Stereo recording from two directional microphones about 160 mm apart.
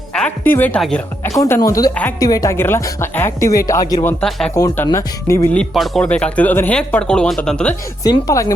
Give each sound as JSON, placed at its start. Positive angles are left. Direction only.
{"t": 0.1, "sound": "a woman's voice", "side_deg": 10}
{"t": 1.3, "sound": "speech", "side_deg": 20}
{"t": 4.2, "sound": "speech", "side_deg": 5}
{"t": 4.5, "sound": "speech", "side_deg": 20}
{"t": 5.5, "sound": "speech", "side_deg": 0}
{"t": 8.0, "sound": "speech", "side_deg": 20}